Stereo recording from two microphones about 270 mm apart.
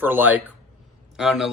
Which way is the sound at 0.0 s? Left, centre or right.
Centre.